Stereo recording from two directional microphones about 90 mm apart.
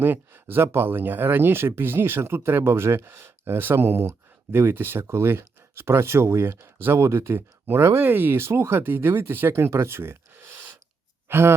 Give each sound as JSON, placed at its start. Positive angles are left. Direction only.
{"t": 0.0, "sound": "speech", "side_deg": -25}
{"t": 11.3, "sound": "speech", "side_deg": -25}